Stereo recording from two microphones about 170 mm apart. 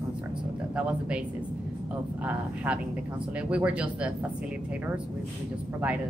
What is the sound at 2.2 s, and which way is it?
Speech, 10° right (ahead or behind).